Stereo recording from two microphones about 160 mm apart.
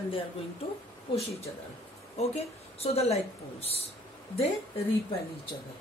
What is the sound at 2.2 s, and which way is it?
A woman's voice, 40° left (ahead or behind).